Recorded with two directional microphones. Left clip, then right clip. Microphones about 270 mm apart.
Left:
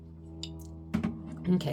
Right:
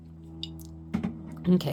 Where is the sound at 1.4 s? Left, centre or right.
Right.